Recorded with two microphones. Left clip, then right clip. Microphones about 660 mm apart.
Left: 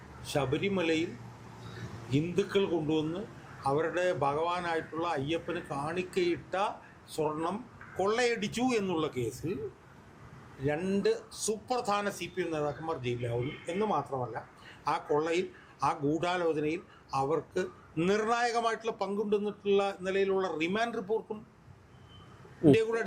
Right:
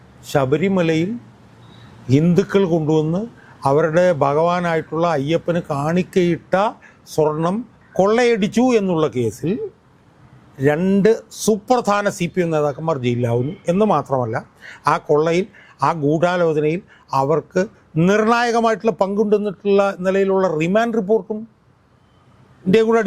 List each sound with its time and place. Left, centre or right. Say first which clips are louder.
0.3 s speech: right 13 dB; right
2.0 s a man's voice: right 14 dB; right
10.7 s a man's voice: right 14 dB; right
22.7 s a man's voice: right 14 dB; right